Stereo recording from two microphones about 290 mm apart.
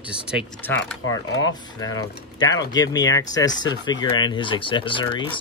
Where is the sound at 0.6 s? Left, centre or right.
Centre.